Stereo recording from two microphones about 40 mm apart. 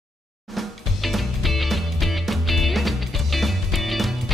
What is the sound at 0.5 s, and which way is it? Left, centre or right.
Music, centre.